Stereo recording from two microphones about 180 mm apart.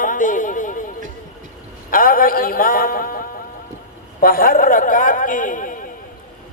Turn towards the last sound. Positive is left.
turn(degrees=50)  # may be behind; listen again after turning